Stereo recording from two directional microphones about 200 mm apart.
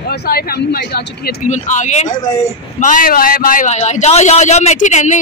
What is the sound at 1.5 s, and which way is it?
A man's voice, 35° left (ahead or behind).